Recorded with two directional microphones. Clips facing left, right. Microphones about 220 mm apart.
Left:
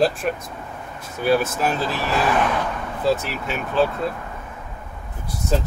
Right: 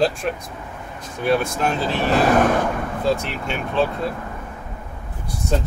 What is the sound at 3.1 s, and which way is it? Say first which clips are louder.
Speech: left 1 dB; 5° left (ahead or behind).